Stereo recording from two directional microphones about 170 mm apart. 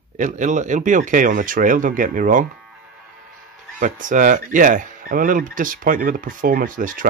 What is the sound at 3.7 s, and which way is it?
Speech, 50° right (ahead or behind).